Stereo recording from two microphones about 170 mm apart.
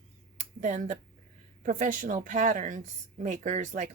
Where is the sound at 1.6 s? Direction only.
50° right (ahead or behind).